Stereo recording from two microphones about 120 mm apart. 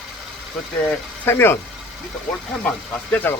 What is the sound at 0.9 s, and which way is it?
Speech, 15° left (ahead or behind).